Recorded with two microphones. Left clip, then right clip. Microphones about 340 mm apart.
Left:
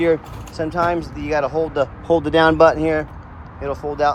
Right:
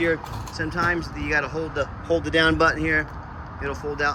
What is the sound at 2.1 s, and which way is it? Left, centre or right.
Speech, left.